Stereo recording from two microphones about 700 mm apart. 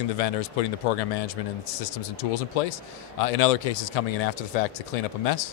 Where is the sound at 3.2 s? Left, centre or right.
Left.